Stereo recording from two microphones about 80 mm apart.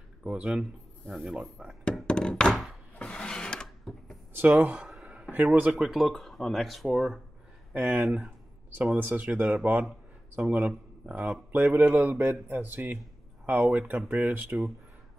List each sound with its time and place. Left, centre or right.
0.2 s speech: centre
0.5 s speech: centre
2.0 s thunk: centre
3.0 s a sound: centre
4.3 s speech: right
5.7 s speech: centre
7.7 s speech: right